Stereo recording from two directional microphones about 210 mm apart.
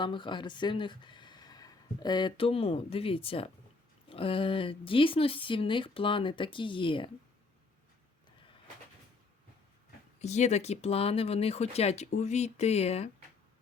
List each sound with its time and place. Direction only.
0.0 s a woman's voice: 20° left (ahead or behind)
10.2 s speech: 35° left (ahead or behind)